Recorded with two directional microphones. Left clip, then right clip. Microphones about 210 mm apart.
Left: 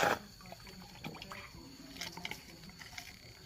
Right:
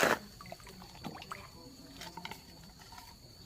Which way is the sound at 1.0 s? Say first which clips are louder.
Right 2 dB; 10° right (ahead or behind).